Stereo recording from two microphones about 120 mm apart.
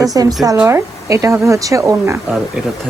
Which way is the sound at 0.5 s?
15° right (ahead or behind).